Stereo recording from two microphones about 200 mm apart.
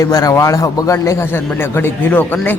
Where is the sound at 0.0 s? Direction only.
20° left (ahead or behind).